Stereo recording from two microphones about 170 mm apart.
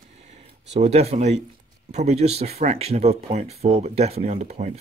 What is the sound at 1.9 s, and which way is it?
Speech, 40° right (ahead or behind).